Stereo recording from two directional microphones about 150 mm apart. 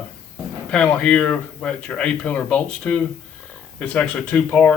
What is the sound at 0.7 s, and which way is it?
Speech, 10° left (ahead or behind).